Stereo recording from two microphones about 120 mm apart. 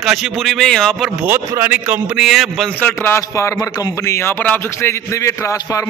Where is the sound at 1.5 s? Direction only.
15° right (ahead or behind).